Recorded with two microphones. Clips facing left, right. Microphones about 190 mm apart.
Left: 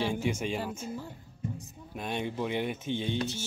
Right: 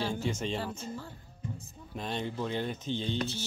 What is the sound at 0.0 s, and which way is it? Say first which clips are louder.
Speech: left 2 dB; 15° left (ahead or behind).